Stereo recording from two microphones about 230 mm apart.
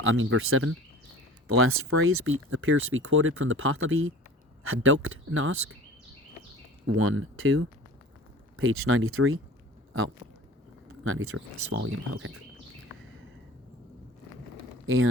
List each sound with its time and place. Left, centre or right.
0.0 s speech: right
6.8 s speech: right
11.0 s speech: right
11.7 s speech: right
14.8 s speech: right